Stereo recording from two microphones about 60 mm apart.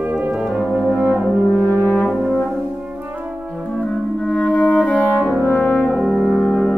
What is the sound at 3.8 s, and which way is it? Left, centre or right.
French horn, centre.